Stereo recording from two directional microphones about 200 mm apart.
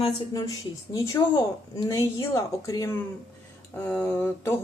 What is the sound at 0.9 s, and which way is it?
Speech, 15° left (ahead or behind).